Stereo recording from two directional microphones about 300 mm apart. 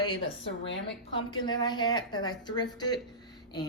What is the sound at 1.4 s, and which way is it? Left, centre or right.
Speech, centre.